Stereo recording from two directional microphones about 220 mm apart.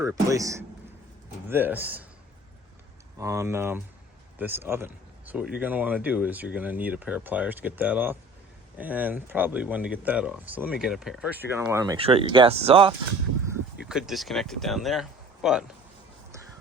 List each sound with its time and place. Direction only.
0.0 s speech: 15° right (ahead or behind)
3.2 s speech: 15° right (ahead or behind)
13.5 s speech: 5° right (ahead or behind)